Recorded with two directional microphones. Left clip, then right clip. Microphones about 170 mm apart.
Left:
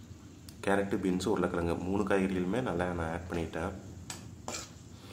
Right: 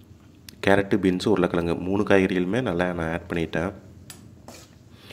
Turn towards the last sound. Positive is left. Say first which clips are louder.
# right 9 dB
turn(degrees=-40)  # may be behind; listen again after turning